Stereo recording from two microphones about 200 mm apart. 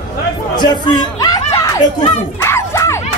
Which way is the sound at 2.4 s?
15° left (ahead or behind).